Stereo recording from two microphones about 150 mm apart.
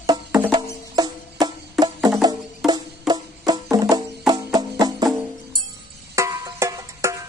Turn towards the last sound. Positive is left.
turn(degrees=-20)  # may be behind; listen again after turning